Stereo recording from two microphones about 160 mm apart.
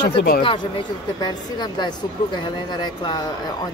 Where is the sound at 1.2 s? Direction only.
25° left (ahead or behind).